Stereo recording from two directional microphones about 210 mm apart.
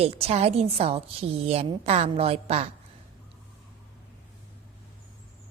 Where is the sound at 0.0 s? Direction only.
30° right (ahead or behind).